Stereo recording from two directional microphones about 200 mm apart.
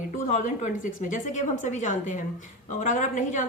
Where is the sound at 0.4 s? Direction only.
40° left (ahead or behind).